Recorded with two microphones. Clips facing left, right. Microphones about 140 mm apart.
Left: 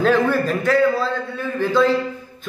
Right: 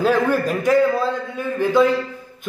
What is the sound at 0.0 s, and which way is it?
A man's voice, 10° right (ahead or behind).